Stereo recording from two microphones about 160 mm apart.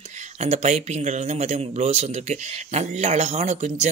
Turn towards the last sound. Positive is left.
turn(degrees=-45)  # may be behind; listen again after turning